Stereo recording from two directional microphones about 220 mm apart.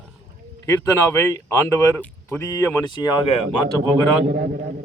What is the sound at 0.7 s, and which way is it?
Speech, 15° left (ahead or behind).